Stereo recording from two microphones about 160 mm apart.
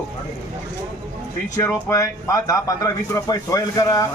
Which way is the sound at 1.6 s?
20° left (ahead or behind).